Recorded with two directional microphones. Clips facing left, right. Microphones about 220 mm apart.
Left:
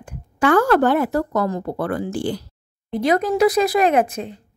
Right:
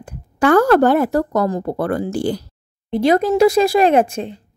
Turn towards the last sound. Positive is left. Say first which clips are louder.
# right 3 dB
turn(degrees=-30)  # may be behind; listen again after turning